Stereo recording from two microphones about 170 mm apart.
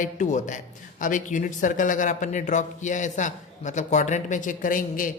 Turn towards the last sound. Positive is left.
turn(degrees=50)  # may be behind; listen again after turning